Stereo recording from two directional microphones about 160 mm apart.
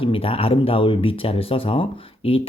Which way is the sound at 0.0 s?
35° left (ahead or behind).